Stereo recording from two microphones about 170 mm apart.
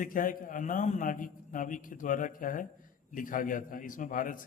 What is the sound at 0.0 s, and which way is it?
A man's voice, 50° left (ahead or behind).